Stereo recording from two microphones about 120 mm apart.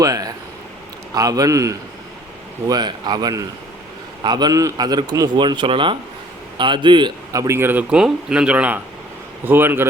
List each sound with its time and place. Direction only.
0.0 s a man's voice: 30° right (ahead or behind)
7.3 s a man's voice: 20° right (ahead or behind)